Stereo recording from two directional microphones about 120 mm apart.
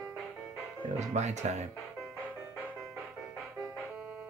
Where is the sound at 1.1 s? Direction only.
70° right (ahead or behind).